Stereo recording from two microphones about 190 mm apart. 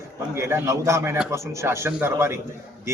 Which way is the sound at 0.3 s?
15° right (ahead or behind).